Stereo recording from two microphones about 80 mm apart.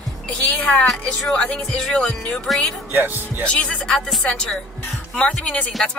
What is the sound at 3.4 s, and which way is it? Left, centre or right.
Music, centre.